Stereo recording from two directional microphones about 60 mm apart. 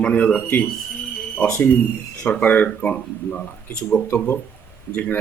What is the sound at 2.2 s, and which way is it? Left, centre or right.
Speech, left.